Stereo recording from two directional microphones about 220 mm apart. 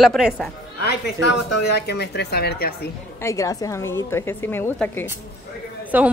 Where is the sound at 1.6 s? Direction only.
50° left (ahead or behind).